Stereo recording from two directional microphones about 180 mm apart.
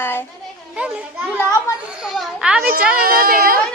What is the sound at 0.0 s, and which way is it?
Children playing, 10° left (ahead or behind).